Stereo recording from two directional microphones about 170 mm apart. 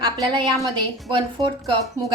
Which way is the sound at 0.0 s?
25° right (ahead or behind).